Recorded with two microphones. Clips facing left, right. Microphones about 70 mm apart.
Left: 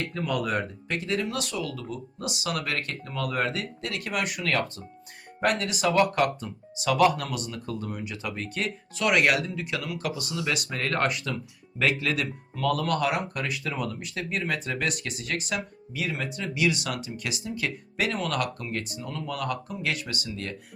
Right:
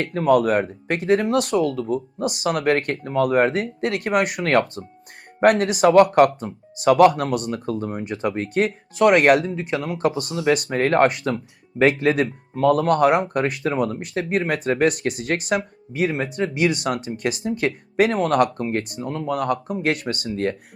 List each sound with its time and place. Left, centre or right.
0.0 s speech: right